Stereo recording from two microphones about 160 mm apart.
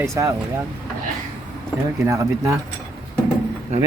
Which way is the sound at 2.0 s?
20° right (ahead or behind).